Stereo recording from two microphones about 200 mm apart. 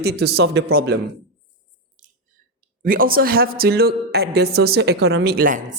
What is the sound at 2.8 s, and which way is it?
Speech, 45° right (ahead or behind).